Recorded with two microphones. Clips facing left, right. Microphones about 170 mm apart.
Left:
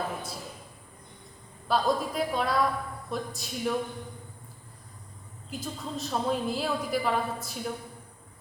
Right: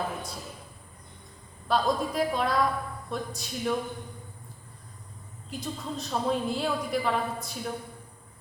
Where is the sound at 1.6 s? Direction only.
Centre (ahead or behind).